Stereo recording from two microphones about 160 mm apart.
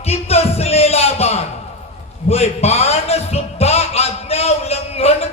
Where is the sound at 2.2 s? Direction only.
40° left (ahead or behind).